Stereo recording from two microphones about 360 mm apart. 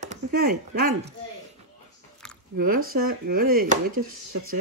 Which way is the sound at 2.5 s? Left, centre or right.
Right.